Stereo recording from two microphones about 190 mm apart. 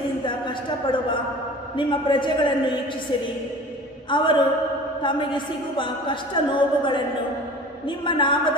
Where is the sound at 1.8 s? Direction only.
25° left (ahead or behind).